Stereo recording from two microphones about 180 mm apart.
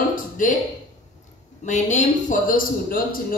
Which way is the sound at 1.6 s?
40° left (ahead or behind).